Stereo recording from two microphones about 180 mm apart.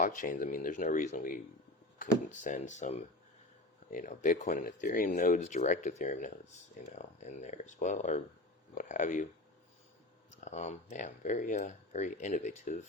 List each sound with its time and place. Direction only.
0.0 s speech: 50° left (ahead or behind)
10.4 s speech: 40° left (ahead or behind)